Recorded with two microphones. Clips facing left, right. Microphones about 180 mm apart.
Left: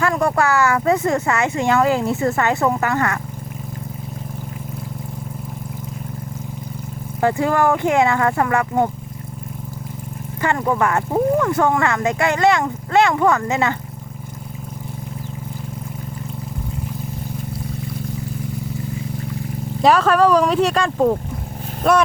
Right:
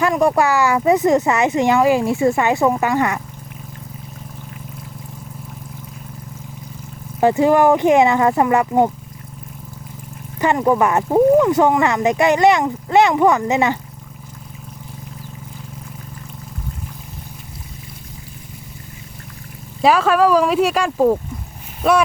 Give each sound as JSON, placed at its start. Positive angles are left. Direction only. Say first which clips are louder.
{"t": 0.0, "sound": "speech", "louder": "right 3 dB", "side_deg": -15}
{"t": 7.2, "sound": "speech", "louder": "right 4 dB", "side_deg": -20}
{"t": 10.4, "sound": "speech", "louder": "right 4 dB", "side_deg": -15}
{"t": 19.8, "sound": "speech", "louder": "even", "side_deg": 0}